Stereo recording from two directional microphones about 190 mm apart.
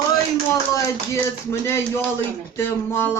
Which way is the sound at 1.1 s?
15° left (ahead or behind).